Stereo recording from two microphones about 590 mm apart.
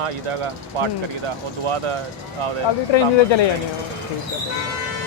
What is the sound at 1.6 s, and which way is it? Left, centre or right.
Speech, right.